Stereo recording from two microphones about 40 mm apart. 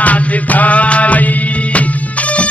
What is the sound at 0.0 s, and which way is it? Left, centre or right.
Music, left.